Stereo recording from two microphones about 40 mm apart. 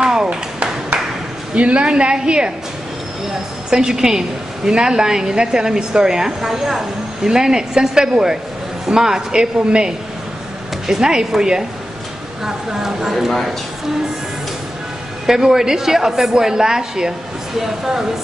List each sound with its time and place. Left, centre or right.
0.0 s a sound: right
1.5 s a woman's voice: right; by 13.3 s centre
15.2 s a woman's voice: centre